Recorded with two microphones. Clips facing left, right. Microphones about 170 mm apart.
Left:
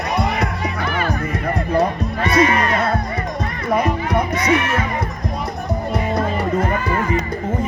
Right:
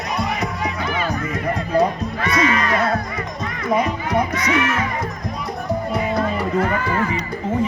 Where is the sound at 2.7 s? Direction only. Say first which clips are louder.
Even; 30° left (ahead or behind).